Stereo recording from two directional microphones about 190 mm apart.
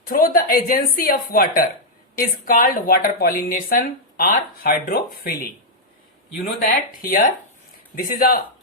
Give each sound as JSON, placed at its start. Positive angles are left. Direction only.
{"t": 0.1, "sound": "a woman's voice", "side_deg": 50}